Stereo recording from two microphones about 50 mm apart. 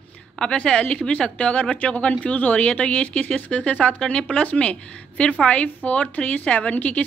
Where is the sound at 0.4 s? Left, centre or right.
Centre.